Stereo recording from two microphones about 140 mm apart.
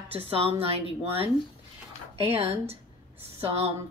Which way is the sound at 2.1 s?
45° right (ahead or behind).